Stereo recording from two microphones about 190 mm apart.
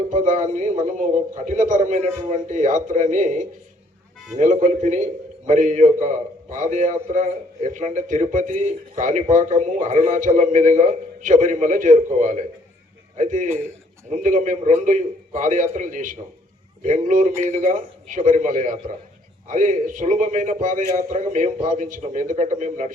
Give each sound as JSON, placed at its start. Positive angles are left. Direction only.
{"t": 0.1, "sound": "a man's voice", "side_deg": -40}